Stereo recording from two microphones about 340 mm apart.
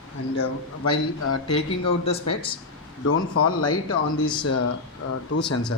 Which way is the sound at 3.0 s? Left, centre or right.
Left.